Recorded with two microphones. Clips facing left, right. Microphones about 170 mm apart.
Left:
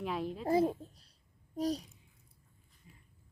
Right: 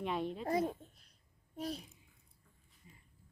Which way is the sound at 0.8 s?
35° left (ahead or behind).